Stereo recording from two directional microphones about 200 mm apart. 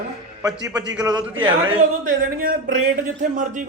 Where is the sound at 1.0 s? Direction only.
20° right (ahead or behind).